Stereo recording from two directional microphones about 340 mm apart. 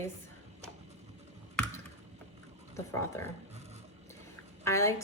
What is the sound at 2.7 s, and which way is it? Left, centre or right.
Speech, centre.